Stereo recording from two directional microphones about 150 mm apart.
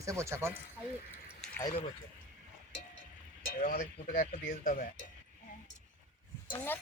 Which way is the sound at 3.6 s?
60° left (ahead or behind).